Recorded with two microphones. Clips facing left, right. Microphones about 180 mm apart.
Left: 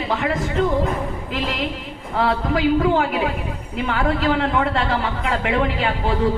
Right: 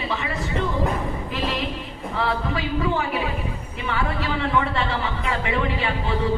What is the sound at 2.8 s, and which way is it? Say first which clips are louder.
A man's voice: left 5 dB; 55° left (ahead or behind).